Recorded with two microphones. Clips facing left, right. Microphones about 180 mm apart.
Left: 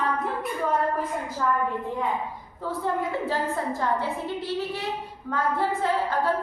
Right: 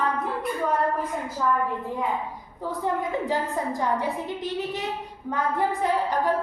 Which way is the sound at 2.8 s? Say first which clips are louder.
Right 1 dB; 15° right (ahead or behind).